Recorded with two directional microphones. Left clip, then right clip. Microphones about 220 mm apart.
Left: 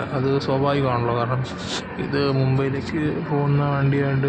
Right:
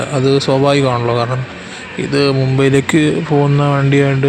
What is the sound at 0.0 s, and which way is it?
A man's voice, 40° right (ahead or behind).